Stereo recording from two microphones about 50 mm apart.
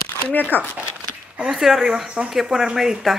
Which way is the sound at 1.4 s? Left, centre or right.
Centre.